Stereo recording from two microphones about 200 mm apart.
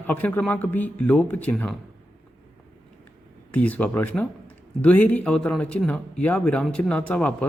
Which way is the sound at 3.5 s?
5° left (ahead or behind).